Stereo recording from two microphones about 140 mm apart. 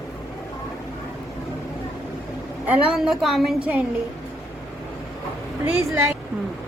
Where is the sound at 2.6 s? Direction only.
Centre (ahead or behind).